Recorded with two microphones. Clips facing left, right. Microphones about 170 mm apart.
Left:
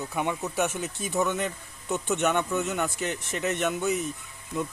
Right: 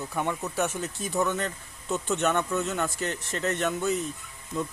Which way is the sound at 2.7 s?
Centre (ahead or behind).